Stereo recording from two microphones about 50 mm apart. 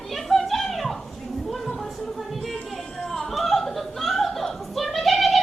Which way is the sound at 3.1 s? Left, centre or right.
Centre.